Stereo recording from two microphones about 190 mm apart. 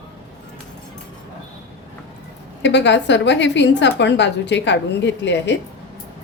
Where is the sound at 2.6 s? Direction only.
70° left (ahead or behind).